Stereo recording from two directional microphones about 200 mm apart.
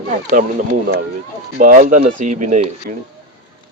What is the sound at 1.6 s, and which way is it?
Speech, 45° right (ahead or behind).